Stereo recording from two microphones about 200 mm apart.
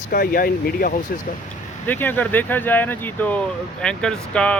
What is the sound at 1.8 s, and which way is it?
Speech, 10° left (ahead or behind).